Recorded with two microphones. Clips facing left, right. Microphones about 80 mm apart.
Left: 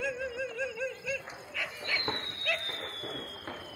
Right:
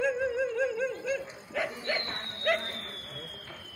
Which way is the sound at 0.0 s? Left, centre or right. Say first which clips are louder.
Right 7 dB; right.